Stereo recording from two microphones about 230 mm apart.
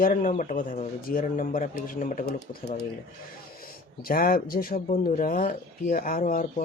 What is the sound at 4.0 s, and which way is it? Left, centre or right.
Speech, left.